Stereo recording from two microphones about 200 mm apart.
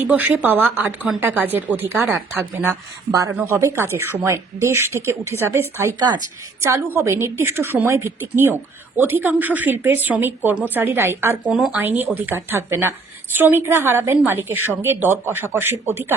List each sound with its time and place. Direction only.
0.1 s a woman's voice: 10° right (ahead or behind)